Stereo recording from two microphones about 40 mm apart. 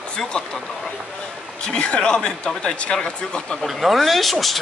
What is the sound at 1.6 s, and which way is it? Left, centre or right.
Speech, left.